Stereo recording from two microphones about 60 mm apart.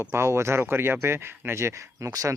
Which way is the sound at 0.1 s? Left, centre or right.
Right.